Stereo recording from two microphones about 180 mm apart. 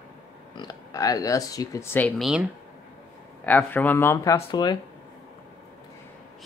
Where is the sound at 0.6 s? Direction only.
20° left (ahead or behind); by 2.4 s centre (ahead or behind).